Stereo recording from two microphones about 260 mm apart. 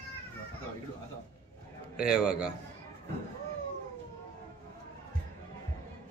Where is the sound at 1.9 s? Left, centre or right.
Centre.